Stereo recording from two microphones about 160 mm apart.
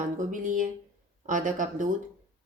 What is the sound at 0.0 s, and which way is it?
Speech, 55° right (ahead or behind).